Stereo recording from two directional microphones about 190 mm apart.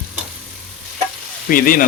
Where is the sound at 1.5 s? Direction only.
50° left (ahead or behind).